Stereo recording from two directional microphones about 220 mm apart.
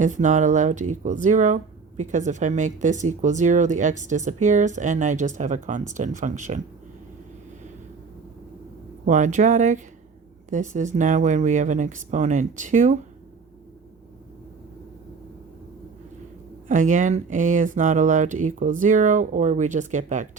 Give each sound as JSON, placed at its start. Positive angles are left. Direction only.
{"t": 0.0, "sound": "speech", "side_deg": -35}
{"t": 9.0, "sound": "speech", "side_deg": -35}
{"t": 16.6, "sound": "speech", "side_deg": -35}